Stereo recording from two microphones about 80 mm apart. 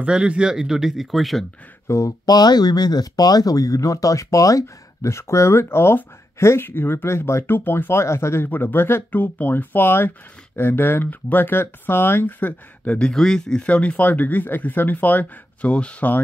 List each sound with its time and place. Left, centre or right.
0.0 s speech: centre
1.9 s speech: left
2.2 s speech: left
8.5 s speech: left